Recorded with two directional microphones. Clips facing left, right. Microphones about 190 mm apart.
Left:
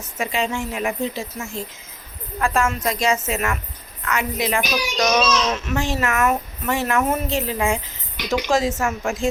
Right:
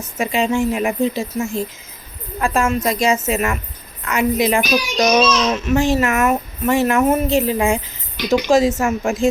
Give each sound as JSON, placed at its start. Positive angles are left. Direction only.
{"t": 0.2, "sound": "a woman's voice", "side_deg": -15}